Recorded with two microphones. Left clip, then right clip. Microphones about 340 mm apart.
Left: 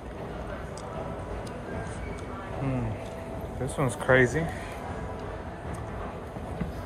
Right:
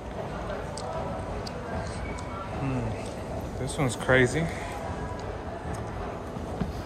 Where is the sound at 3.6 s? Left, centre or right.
Centre.